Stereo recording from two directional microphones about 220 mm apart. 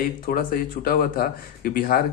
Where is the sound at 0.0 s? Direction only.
40° left (ahead or behind).